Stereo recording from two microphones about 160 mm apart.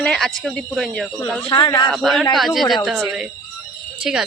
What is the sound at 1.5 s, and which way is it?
Speech, 25° left (ahead or behind).